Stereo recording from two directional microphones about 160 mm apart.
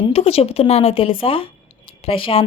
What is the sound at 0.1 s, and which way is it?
Speech, 40° left (ahead or behind).